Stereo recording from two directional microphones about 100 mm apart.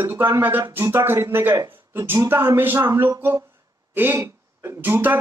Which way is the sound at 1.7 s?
20° right (ahead or behind).